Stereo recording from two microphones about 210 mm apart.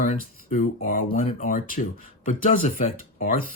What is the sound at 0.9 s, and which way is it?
Speech, 35° left (ahead or behind).